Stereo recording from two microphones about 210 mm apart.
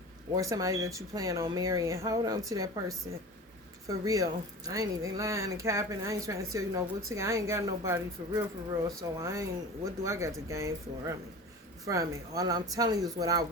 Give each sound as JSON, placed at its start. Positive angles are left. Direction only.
{"t": 0.3, "sound": "speech", "side_deg": -15}
{"t": 3.8, "sound": "speech", "side_deg": -15}